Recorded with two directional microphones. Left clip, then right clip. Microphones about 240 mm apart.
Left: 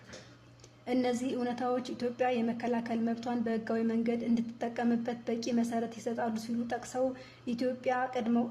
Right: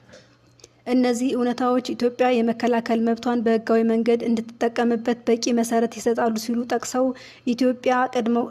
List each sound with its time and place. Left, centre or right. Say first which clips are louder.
0.9 s a woman's voice: right 10 dB; right